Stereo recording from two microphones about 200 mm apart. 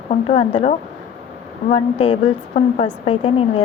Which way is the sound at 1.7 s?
30° left (ahead or behind).